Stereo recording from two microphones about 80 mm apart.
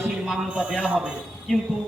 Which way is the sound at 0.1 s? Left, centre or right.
Centre.